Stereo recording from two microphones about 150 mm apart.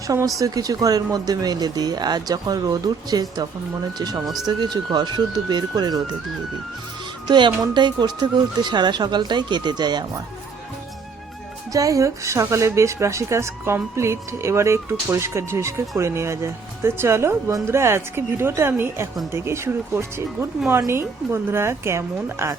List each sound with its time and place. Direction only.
0.3 s speech: 25° right (ahead or behind)
7.3 s speech: 30° right (ahead or behind)
11.7 s speech: 20° right (ahead or behind)